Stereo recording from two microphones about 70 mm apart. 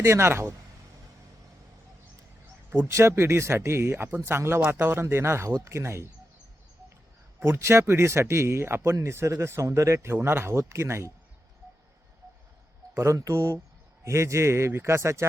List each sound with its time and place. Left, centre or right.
0.0 s speech: right
2.6 s speech: right
7.4 s speech: right
13.0 s speech: right